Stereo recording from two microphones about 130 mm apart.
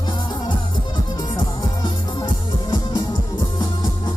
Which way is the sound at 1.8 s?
30° left (ahead or behind).